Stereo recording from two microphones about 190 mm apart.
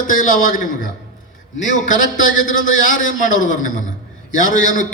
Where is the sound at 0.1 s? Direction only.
45° left (ahead or behind).